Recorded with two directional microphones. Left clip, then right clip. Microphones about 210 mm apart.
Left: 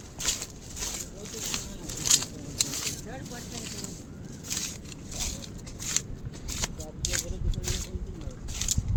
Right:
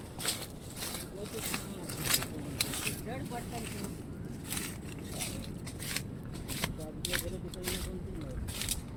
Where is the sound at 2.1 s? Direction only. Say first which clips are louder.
Left 5 dB; 40° left (ahead or behind).